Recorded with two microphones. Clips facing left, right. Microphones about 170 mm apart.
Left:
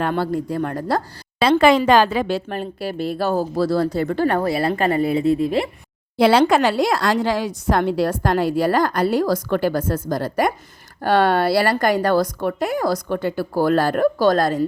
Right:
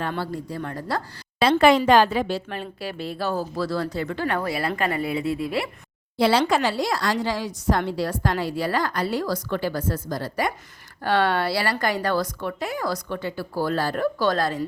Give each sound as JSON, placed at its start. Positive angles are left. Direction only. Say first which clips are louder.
{"t": 0.0, "sound": "a woman's voice", "louder": "left 7 dB", "side_deg": 55}
{"t": 1.5, "sound": "a woman's voice", "louder": "left 2 dB", "side_deg": 90}
{"t": 2.5, "sound": "a woman's voice", "louder": "left 6 dB", "side_deg": 45}
{"t": 3.6, "sound": "speech", "louder": "left 7 dB", "side_deg": 35}
{"t": 6.1, "sound": "a woman's voice", "louder": "left 5 dB", "side_deg": 60}